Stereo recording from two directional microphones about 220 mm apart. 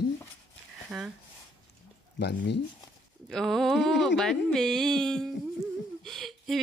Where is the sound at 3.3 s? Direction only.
Centre (ahead or behind).